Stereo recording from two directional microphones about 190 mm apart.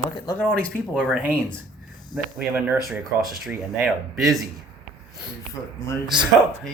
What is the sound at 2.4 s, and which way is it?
Speech, 10° right (ahead or behind).